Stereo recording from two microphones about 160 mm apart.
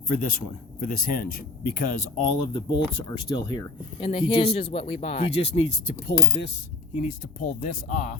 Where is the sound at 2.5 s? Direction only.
30° left (ahead or behind).